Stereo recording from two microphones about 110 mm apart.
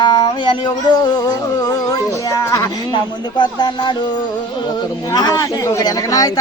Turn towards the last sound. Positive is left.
turn(degrees=35)  # may be behind; listen again after turning